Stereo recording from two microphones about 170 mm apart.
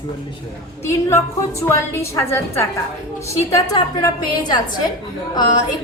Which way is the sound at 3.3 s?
20° left (ahead or behind).